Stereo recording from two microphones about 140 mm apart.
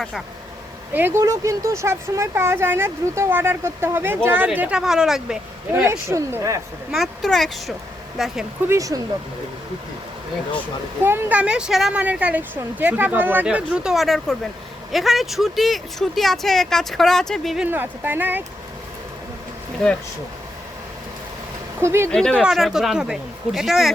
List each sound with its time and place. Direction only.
0.9 s speech: 15° right (ahead or behind)
5.7 s speech: 15° right (ahead or behind)
6.9 s speech: centre (ahead or behind)
8.6 s speech: 20° right (ahead or behind)
11.0 s speech: 15° right (ahead or behind); by 17.7 s centre (ahead or behind)
17.7 s speech: 15° right (ahead or behind)
21.8 s speech: 20° right (ahead or behind)
22.1 s speech: 5° left (ahead or behind)